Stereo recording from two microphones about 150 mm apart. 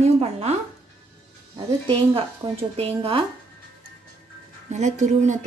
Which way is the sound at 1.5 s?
40° right (ahead or behind).